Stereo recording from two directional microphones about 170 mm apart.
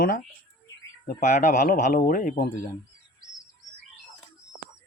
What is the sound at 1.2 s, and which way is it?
Speech, 50° left (ahead or behind).